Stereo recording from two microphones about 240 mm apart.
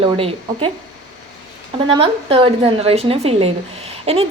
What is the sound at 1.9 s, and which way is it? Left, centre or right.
A woman's voice, right.